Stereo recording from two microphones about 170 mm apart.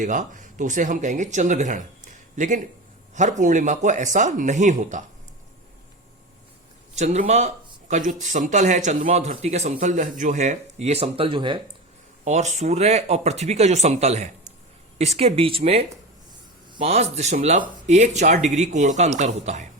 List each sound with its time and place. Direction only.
0.0 s speech: 50° right (ahead or behind)
6.9 s speech: 40° right (ahead or behind)
12.2 s speech: 45° right (ahead or behind)